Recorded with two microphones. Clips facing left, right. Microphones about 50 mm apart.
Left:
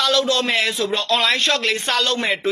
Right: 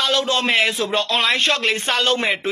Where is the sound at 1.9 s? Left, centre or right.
Right.